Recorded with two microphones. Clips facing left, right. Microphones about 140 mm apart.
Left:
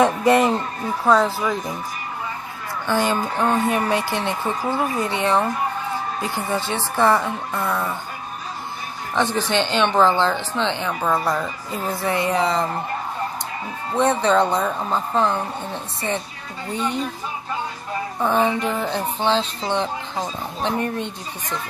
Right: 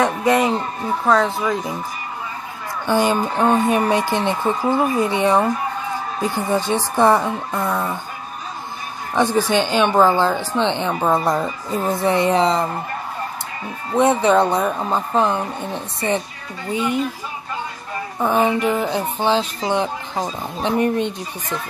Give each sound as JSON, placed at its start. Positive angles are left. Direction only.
{"t": 0.0, "sound": "a sound", "side_deg": 5}
{"t": 1.0, "sound": "speech", "side_deg": 5}
{"t": 2.9, "sound": "speech", "side_deg": -15}
{"t": 9.1, "sound": "speech", "side_deg": -10}
{"t": 13.9, "sound": "speech", "side_deg": -15}
{"t": 18.2, "sound": "speech", "side_deg": -10}